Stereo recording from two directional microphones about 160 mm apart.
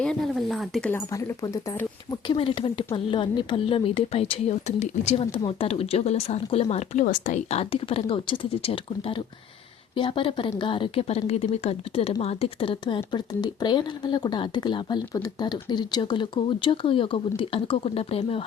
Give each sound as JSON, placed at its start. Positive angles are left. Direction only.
{"t": 0.0, "sound": "speech", "side_deg": 5}
{"t": 0.9, "sound": "speech", "side_deg": 15}
{"t": 2.2, "sound": "speech", "side_deg": 35}
{"t": 7.5, "sound": "speech", "side_deg": 40}